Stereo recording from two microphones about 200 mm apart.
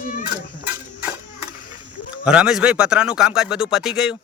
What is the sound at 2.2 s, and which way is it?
A man's voice, 5° right (ahead or behind).